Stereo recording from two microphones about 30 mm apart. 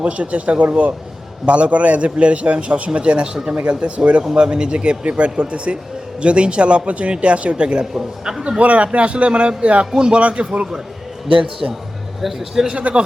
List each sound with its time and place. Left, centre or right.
0.0 s a man's voice: right
3.0 s speech: right
3.5 s a man's voice: right
4.4 s speech: right
7.5 s speech: right
7.9 s a man's voice: centre
8.4 s speech: right
10.2 s a man's voice: right
11.3 s a man's voice: right
12.2 s a man's voice: centre